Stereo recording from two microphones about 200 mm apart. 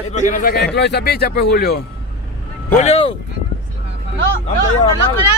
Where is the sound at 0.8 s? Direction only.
55° left (ahead or behind).